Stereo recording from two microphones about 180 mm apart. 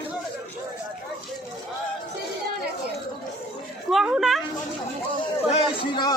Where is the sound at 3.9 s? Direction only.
Centre (ahead or behind).